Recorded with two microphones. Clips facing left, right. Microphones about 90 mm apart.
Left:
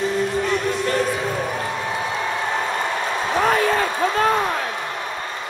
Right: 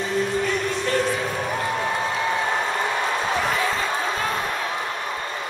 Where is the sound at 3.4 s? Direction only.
50° left (ahead or behind).